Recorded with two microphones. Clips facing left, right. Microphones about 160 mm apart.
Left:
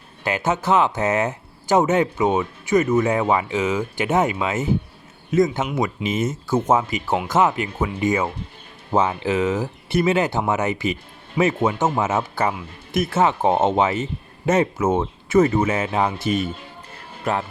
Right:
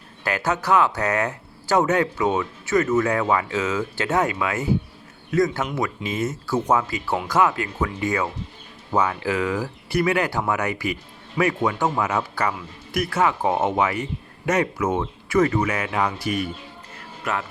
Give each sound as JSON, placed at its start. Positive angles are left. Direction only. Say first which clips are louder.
{"t": 0.3, "sound": "speech", "louder": "left 2 dB", "side_deg": 20}